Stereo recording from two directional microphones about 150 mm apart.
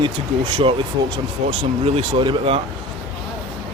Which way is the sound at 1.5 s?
40° right (ahead or behind).